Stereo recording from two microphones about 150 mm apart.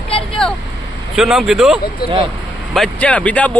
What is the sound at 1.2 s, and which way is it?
Speech, 5° right (ahead or behind).